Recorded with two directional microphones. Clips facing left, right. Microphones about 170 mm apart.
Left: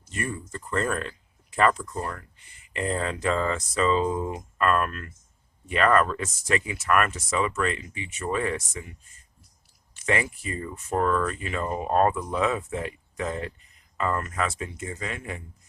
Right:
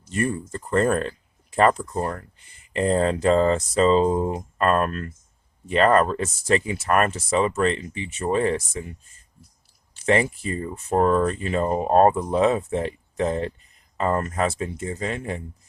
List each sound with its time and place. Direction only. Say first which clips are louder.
0.0 s speech: right 7 dB; 35° right (ahead or behind)